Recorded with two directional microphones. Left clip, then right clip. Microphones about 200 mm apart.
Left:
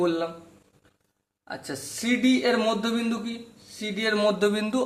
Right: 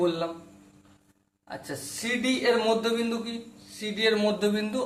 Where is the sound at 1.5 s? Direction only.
45° left (ahead or behind).